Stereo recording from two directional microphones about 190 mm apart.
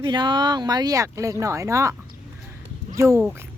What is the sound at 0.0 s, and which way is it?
Speech, 25° right (ahead or behind).